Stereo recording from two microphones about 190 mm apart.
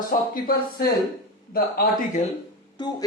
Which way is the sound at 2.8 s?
25° left (ahead or behind).